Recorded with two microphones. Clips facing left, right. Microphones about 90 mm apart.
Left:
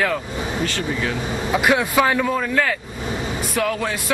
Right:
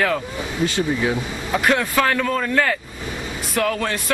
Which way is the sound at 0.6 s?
15° right (ahead or behind).